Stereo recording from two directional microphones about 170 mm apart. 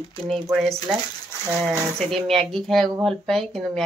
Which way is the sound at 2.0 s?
Centre (ahead or behind).